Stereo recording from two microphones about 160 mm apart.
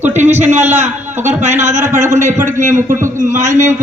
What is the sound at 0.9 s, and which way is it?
Speech, 15° right (ahead or behind).